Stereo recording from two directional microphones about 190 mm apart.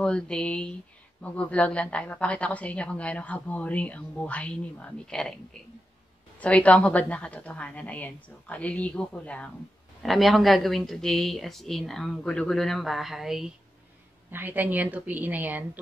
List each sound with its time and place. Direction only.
0.0 s a woman's voice: 5° left (ahead or behind)